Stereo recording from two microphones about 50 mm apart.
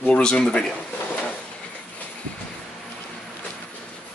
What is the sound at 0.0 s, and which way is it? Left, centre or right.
Speech, centre.